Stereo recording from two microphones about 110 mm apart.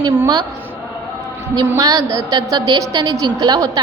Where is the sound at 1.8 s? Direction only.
30° right (ahead or behind).